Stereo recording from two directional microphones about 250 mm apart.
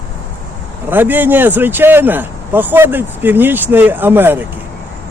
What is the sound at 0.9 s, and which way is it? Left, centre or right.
A man's voice, centre.